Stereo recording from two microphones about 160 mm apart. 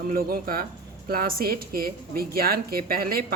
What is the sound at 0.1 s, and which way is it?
A woman's voice, 65° right (ahead or behind).